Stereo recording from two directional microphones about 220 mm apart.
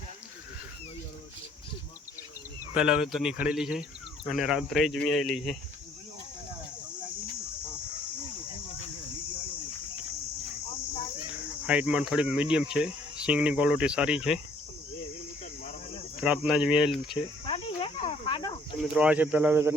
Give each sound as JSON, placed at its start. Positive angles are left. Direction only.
{"t": 2.7, "sound": "speech", "side_deg": -5}
{"t": 11.6, "sound": "speech", "side_deg": -5}
{"t": 16.2, "sound": "speech", "side_deg": -5}
{"t": 17.4, "sound": "cricket", "side_deg": 25}
{"t": 18.8, "sound": "speech", "side_deg": -5}